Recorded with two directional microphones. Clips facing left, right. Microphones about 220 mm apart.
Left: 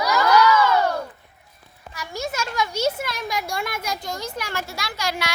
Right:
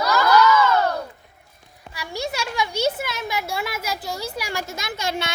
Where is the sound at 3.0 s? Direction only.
5° right (ahead or behind).